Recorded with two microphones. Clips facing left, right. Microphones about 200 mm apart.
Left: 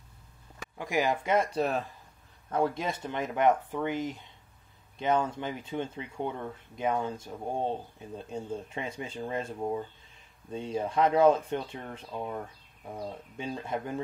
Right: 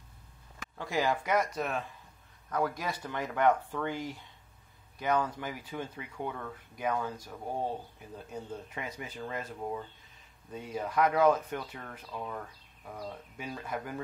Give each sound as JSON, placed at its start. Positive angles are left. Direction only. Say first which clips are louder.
{"t": 0.7, "sound": "speech", "louder": "left 2 dB", "side_deg": 15}